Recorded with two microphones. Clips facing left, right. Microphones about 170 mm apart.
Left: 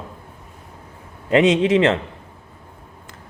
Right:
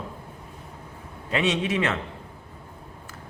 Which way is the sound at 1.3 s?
90° left.